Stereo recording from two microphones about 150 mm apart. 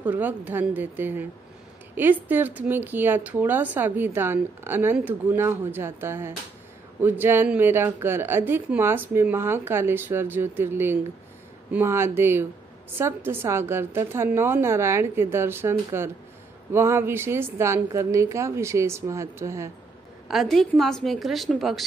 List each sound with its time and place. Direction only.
0.0 s a woman's voice: 10° right (ahead or behind)
20.2 s a woman's voice: centre (ahead or behind)